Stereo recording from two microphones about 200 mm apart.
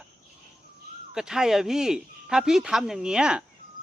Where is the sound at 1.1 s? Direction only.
5° right (ahead or behind).